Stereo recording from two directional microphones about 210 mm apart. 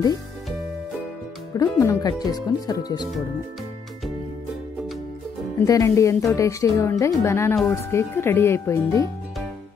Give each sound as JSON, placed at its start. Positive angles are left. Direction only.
{"t": 1.6, "sound": "speech", "side_deg": 15}
{"t": 5.7, "sound": "speech", "side_deg": 15}